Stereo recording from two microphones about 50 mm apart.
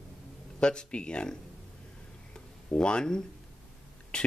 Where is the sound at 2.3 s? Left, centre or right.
Centre.